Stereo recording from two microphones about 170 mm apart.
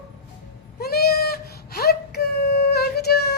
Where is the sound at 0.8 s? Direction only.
65° left (ahead or behind).